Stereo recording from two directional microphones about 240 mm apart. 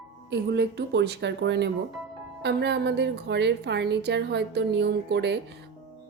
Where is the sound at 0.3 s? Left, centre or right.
Right.